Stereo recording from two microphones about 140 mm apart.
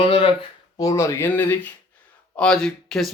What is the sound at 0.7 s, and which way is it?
Speech, 25° left (ahead or behind).